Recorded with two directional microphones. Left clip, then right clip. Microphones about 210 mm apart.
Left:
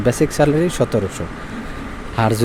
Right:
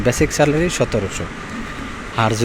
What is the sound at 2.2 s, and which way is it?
Speech, 20° left (ahead or behind).